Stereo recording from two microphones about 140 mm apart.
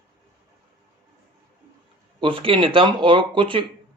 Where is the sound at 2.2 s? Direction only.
40° right (ahead or behind).